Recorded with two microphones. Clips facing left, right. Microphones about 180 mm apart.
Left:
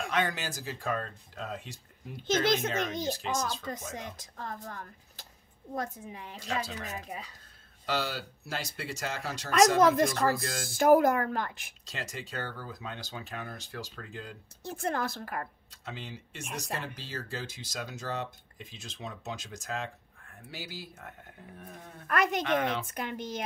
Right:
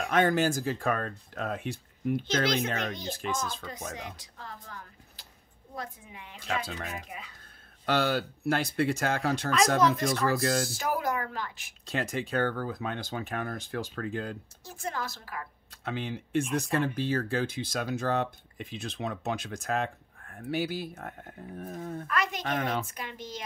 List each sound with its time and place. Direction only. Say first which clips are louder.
0.1 s speech: right 9 dB; 50° right (ahead or behind)
2.2 s speech: left 4 dB; 45° left (ahead or behind)
3.1 s speech: left 1 dB; 55° right (ahead or behind)
3.9 s a woman's voice: even; 45° left (ahead or behind)
7.8 s speech: right 6 dB; 60° right (ahead or behind)
9.8 s speech: left 2 dB; 55° left (ahead or behind)
11.8 s speech: right 9 dB; 55° right (ahead or behind)
14.6 s a woman's voice: left 5 dB; 55° left (ahead or behind)
15.7 s speech: right 13 dB; 60° right (ahead or behind); by 22.0 s 45° right (ahead or behind)
22.0 s speech: left 5 dB; 50° left (ahead or behind)
22.6 s speech: even; 50° right (ahead or behind)
22.8 s speech: left 4 dB; 55° left (ahead or behind)